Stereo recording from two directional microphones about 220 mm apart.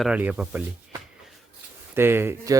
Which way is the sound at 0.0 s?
5° right (ahead or behind).